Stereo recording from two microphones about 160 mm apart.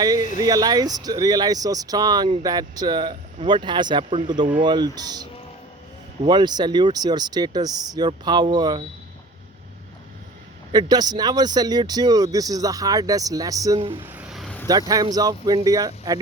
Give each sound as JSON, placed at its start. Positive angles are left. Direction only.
{"t": 0.0, "sound": "a sound", "side_deg": -25}
{"t": 0.4, "sound": "speech", "side_deg": -25}
{"t": 10.7, "sound": "speech", "side_deg": -25}
{"t": 13.7, "sound": "speech", "side_deg": -35}
{"t": 14.1, "sound": "a sound", "side_deg": -5}
{"t": 14.7, "sound": "speech", "side_deg": -25}